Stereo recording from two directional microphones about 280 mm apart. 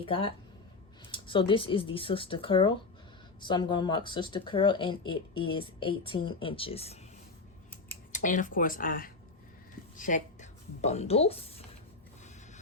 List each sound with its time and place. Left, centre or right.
0.0 s speech: centre
8.1 s speech: left